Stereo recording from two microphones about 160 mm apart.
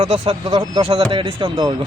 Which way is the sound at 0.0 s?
35° right (ahead or behind).